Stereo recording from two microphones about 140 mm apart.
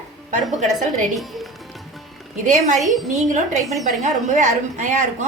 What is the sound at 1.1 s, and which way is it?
Speech, centre (ahead or behind).